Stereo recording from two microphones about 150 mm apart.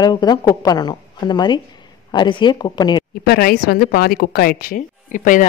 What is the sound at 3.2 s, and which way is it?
A woman's voice, 90° left.